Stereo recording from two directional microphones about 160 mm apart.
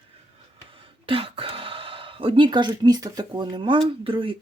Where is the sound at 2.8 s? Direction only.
25° right (ahead or behind).